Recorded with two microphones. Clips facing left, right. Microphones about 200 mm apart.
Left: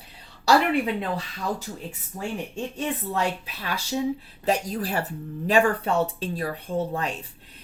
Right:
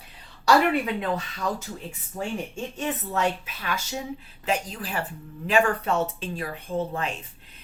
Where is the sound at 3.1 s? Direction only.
35° left (ahead or behind).